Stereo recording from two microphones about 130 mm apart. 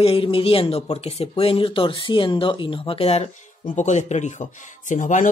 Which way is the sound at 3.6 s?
70° left (ahead or behind).